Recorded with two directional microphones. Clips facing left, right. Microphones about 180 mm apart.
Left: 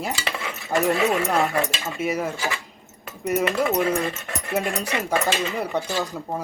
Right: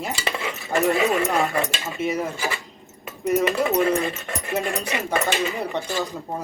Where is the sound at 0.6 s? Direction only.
Centre (ahead or behind).